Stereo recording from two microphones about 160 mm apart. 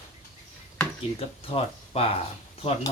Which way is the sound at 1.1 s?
35° left (ahead or behind).